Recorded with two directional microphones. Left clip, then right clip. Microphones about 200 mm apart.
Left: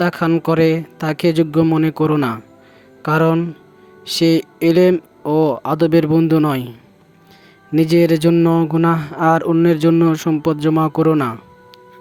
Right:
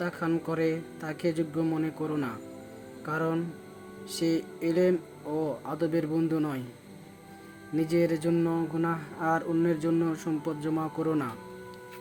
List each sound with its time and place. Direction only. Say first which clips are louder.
0.0 s speech: left 14 dB; 50° left (ahead or behind)
7.7 s speech: left 13 dB; 50° left (ahead or behind)